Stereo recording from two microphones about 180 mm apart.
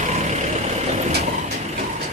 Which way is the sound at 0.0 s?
40° right (ahead or behind).